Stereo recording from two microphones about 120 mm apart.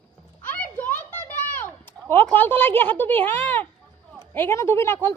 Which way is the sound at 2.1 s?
15° left (ahead or behind).